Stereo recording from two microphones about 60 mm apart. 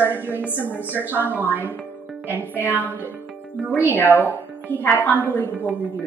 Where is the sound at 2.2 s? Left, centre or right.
Right.